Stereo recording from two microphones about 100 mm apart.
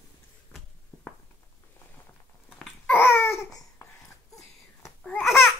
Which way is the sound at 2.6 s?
5° right (ahead or behind).